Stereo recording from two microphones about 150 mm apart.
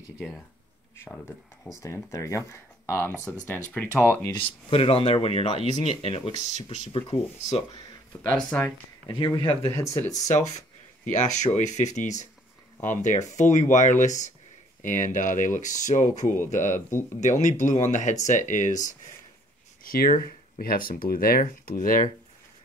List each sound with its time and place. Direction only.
0.9 s speech: 15° left (ahead or behind)
4.3 s speech: 35° left (ahead or behind)
8.4 s speech: 10° left (ahead or behind)
9.0 s speech: 25° left (ahead or behind)
9.5 s speech: 15° left (ahead or behind)
10.0 s speech: 50° left (ahead or behind)
19.8 s speech: 70° left (ahead or behind)